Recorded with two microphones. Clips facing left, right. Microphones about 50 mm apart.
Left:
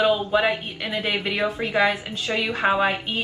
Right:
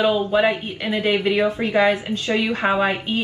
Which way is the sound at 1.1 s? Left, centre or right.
Right.